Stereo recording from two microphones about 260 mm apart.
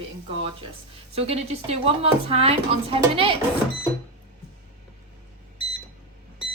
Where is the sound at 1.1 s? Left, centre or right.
Right.